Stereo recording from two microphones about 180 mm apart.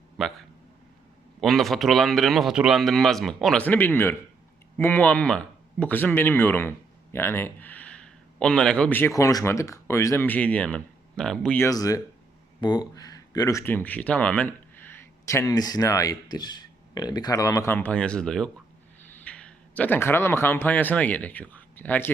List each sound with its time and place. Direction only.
0.2 s a man's voice: centre (ahead or behind)
1.4 s a man's voice: centre (ahead or behind)